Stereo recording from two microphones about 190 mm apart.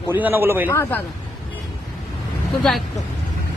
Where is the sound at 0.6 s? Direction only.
10° left (ahead or behind).